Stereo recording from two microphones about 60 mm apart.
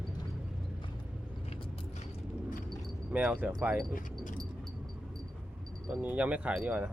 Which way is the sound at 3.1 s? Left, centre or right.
Right.